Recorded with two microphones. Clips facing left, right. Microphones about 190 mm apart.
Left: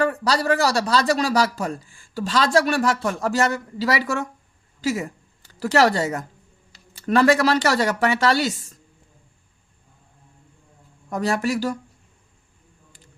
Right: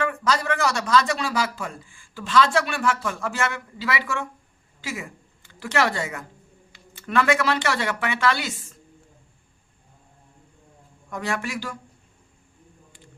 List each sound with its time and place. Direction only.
0.0 s a woman's voice: 35° left (ahead or behind)
11.1 s speech: 40° left (ahead or behind)